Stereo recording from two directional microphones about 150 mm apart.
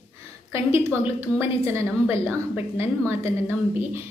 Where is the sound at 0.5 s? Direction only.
15° right (ahead or behind).